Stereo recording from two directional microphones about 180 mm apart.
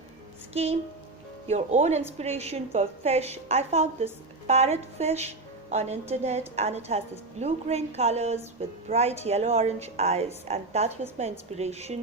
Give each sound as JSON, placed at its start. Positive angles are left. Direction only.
{"t": 0.5, "sound": "a woman's voice", "side_deg": -35}